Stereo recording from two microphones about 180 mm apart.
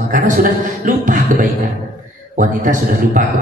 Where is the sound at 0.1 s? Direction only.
50° right (ahead or behind).